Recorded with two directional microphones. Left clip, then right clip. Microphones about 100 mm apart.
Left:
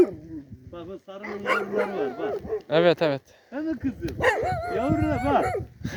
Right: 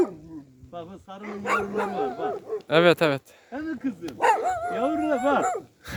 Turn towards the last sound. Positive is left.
turn(degrees=-15)  # may be behind; listen again after turning